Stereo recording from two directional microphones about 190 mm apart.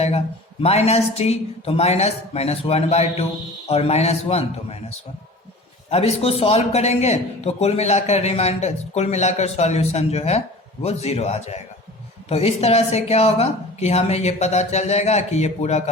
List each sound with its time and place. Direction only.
0.6 s a man's voice: 35° left (ahead or behind)
5.9 s a man's voice: 35° left (ahead or behind)